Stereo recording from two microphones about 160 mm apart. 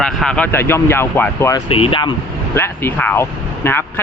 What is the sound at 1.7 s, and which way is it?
Speech, 35° left (ahead or behind).